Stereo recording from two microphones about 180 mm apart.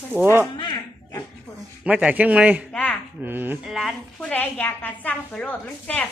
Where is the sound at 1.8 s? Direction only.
5° right (ahead or behind).